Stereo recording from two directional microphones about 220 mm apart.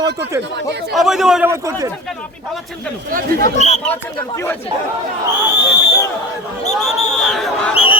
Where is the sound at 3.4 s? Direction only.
30° left (ahead or behind).